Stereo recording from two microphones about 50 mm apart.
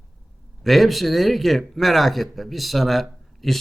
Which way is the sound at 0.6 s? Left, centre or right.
Centre.